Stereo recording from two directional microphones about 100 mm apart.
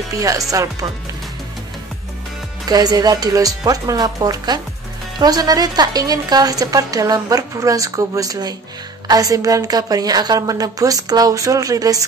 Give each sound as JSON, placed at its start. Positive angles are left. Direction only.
{"t": 0.2, "sound": "a woman's voice", "side_deg": -35}
{"t": 2.6, "sound": "a woman's voice", "side_deg": -40}